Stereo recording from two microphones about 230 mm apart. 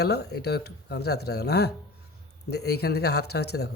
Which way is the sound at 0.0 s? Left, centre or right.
Left.